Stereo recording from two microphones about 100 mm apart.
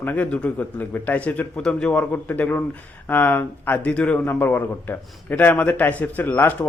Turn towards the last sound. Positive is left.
turn(degrees=20)  # may be behind; listen again after turning